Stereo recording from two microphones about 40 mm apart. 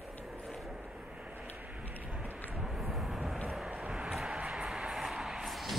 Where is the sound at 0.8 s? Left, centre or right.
Centre.